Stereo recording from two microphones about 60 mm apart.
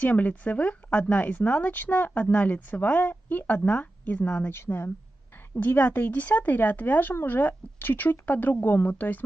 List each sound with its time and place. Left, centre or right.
0.0 s speech: left
4.5 s speech: left